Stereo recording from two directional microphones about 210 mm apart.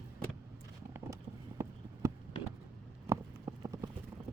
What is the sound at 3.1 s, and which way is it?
Clip-clop, 15° right (ahead or behind).